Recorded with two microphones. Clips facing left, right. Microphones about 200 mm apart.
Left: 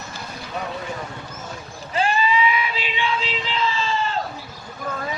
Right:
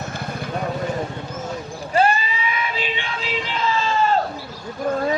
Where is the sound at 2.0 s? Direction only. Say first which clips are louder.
Right 1 dB; 45° right (ahead or behind).